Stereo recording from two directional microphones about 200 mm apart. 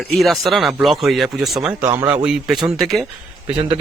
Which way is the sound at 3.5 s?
25° right (ahead or behind).